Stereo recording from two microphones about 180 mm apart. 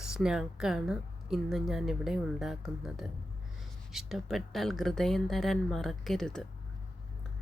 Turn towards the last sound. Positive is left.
turn(degrees=5)  # may be behind; listen again after turning